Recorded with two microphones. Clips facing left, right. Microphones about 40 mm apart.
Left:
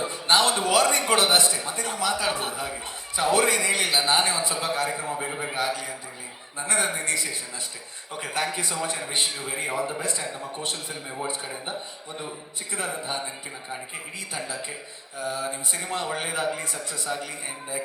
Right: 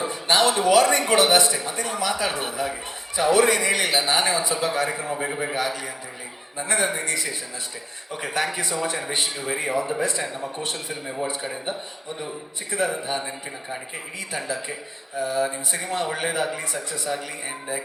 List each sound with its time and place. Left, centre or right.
0.0 s a sound: right
0.8 s a man's voice: right
12.7 s a man's voice: right
14.3 s a man's voice: right